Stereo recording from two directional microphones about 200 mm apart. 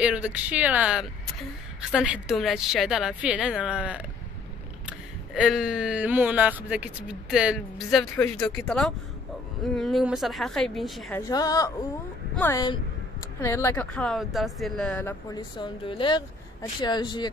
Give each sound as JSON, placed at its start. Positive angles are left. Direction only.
{"t": 0.0, "sound": "speech", "side_deg": -5}
{"t": 11.1, "sound": "speech", "side_deg": 20}
{"t": 15.3, "sound": "speech", "side_deg": 20}